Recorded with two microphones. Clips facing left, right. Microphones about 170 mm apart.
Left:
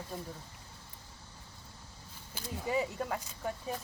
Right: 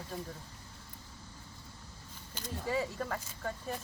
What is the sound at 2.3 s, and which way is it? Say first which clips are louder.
Speech: left 1 dB; 10° left (ahead or behind).